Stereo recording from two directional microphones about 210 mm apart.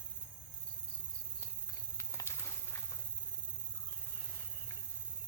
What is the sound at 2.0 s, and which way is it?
Bird flight, 10° left (ahead or behind).